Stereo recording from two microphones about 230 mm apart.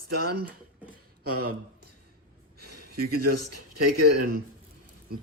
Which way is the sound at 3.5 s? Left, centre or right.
Right.